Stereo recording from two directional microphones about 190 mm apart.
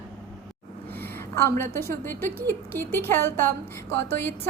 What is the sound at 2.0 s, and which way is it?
A woman's voice, 10° left (ahead or behind).